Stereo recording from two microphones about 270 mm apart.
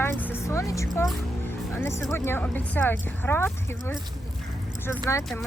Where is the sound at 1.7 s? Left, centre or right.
Centre.